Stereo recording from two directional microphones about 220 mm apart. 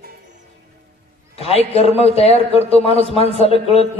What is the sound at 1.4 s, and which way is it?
A man's voice, 25° left (ahead or behind).